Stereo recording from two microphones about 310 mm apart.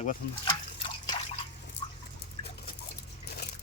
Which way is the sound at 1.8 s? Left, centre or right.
Centre.